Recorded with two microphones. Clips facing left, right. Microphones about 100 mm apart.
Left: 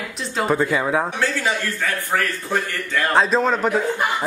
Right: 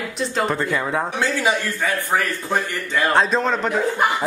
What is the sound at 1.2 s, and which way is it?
A man's voice, 15° right (ahead or behind).